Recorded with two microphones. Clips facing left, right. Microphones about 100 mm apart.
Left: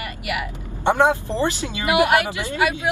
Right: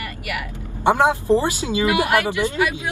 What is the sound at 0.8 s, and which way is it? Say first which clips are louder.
Speech: right 1 dB; 15° right (ahead or behind).